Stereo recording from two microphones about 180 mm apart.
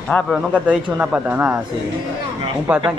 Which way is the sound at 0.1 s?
5° left (ahead or behind).